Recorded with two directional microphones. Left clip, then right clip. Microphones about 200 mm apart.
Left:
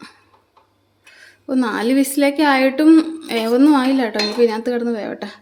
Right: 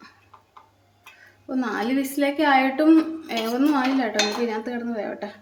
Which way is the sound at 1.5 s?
55° left (ahead or behind).